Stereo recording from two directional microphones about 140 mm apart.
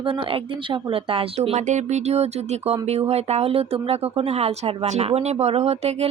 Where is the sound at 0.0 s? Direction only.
40° right (ahead or behind).